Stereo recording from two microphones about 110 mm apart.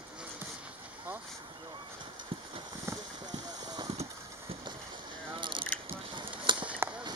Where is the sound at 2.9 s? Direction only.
25° right (ahead or behind).